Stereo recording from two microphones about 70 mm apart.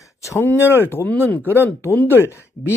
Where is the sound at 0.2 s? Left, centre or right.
Left.